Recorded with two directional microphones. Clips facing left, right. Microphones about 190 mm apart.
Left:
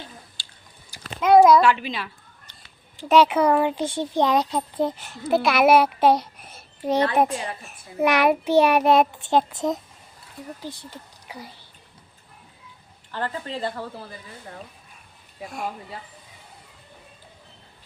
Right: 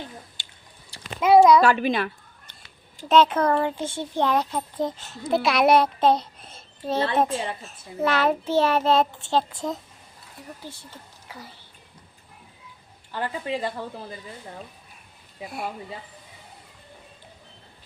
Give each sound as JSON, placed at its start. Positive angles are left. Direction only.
{"t": 0.4, "sound": "chewing", "side_deg": -20}
{"t": 1.2, "sound": "a sound", "side_deg": 0}
{"t": 1.6, "sound": "speech", "side_deg": -45}
{"t": 3.1, "sound": "a child's voice", "side_deg": 10}
{"t": 13.1, "sound": "a woman's voice", "side_deg": -15}